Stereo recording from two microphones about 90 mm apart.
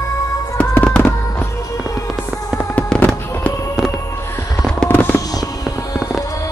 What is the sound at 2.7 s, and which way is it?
Fireworks, 15° left (ahead or behind).